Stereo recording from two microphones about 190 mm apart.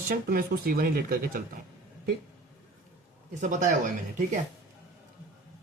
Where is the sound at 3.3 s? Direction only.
40° right (ahead or behind).